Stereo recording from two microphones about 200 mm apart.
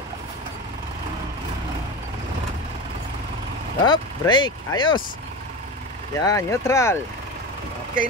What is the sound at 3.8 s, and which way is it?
Vehicle, 20° left (ahead or behind).